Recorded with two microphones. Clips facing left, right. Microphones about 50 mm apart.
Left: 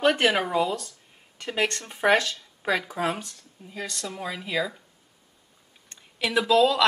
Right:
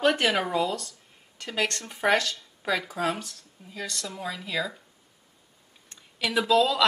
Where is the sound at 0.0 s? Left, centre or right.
Centre.